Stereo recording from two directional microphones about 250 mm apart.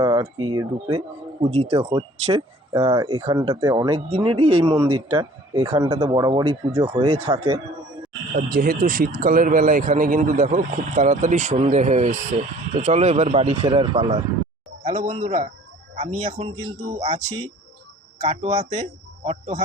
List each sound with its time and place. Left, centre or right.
0.0 s a sound: centre
0.5 s speech: centre
4.4 s speech: right
4.6 s a man's voice: centre
8.4 s speech: right